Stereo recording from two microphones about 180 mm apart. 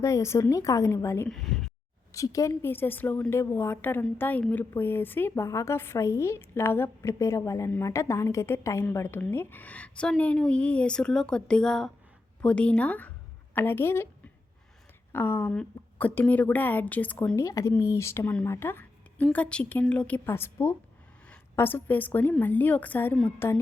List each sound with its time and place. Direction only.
0.0 s a woman's voice: 15° left (ahead or behind)
1.3 s speech: centre (ahead or behind)
2.1 s a woman's voice: 20° left (ahead or behind)
15.1 s a woman's voice: 15° left (ahead or behind)